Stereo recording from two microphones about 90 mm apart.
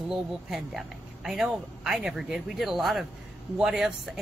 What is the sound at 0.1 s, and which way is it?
Speech, 5° right (ahead or behind).